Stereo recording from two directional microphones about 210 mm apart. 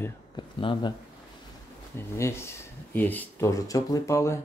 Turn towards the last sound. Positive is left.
turn(degrees=15)  # may be behind; listen again after turning